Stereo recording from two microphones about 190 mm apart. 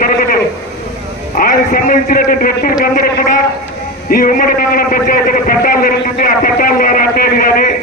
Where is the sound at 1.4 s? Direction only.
45° left (ahead or behind).